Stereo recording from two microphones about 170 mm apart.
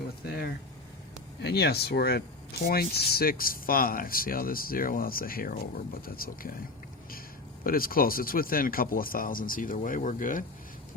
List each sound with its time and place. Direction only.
1.4 s speech: 75° left (ahead or behind); by 6.5 s 60° left (ahead or behind)
7.6 s speech: 60° left (ahead or behind)